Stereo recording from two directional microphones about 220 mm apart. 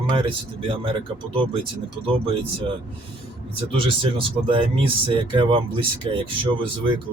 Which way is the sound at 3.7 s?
25° right (ahead or behind).